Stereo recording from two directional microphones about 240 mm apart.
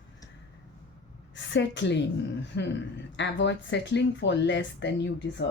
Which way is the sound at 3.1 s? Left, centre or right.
Left.